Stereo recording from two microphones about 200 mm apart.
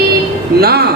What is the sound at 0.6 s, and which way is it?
Music, 50° right (ahead or behind).